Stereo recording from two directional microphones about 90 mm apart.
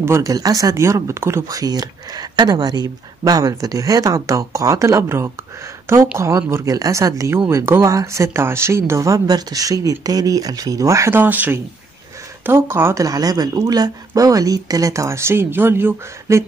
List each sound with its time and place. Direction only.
0.0 s speech: 30° right (ahead or behind)
0.3 s speech: 40° right (ahead or behind)
11.1 s speech: 20° right (ahead or behind)
13.0 s speech: 45° right (ahead or behind); by 16.4 s 30° right (ahead or behind)